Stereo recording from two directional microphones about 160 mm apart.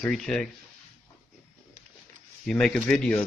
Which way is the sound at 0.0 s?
5° left (ahead or behind).